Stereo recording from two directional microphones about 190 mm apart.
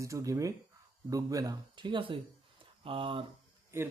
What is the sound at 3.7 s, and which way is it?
Speech, 15° right (ahead or behind).